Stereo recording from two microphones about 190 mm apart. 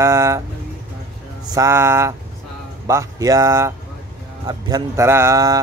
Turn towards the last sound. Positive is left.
turn(degrees=-20)  # may be behind; listen again after turning